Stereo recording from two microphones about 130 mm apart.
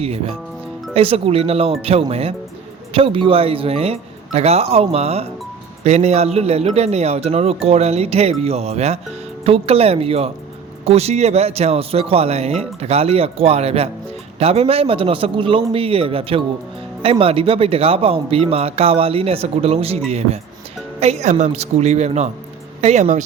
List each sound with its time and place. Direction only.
0.0 s speech: 50° right (ahead or behind)